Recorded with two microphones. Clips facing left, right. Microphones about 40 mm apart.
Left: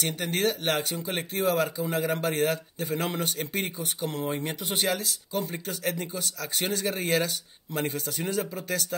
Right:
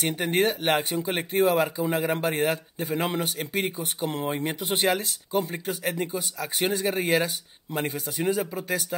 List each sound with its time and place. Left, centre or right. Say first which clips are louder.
0.0 s speech: right 3 dB; centre
4.0 s speech: right 3 dB; right